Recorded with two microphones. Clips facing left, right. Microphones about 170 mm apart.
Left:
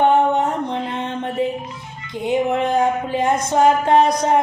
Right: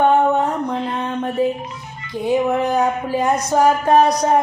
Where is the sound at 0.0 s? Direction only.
25° left (ahead or behind).